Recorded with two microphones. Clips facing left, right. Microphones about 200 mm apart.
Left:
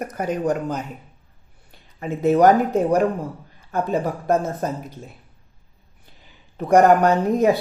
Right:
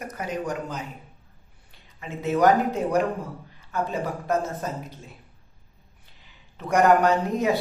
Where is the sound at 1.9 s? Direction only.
45° left (ahead or behind).